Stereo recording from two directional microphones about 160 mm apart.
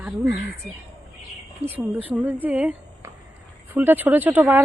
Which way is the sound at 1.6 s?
10° right (ahead or behind).